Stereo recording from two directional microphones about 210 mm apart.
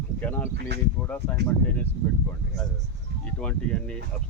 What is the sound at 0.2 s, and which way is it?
Speech, 10° left (ahead or behind).